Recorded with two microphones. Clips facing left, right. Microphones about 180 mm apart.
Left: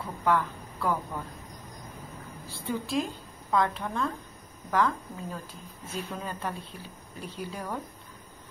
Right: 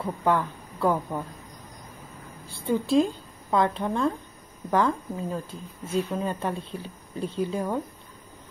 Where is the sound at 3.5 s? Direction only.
25° right (ahead or behind).